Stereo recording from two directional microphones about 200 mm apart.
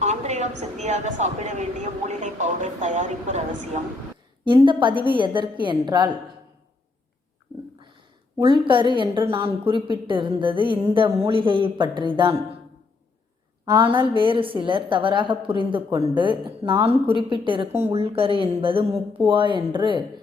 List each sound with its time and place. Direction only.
0.0 s a woman's voice: 35° right (ahead or behind)
4.4 s a woman's voice: 25° right (ahead or behind)
8.4 s a woman's voice: 25° right (ahead or behind)
13.9 s a woman's voice: 25° right (ahead or behind)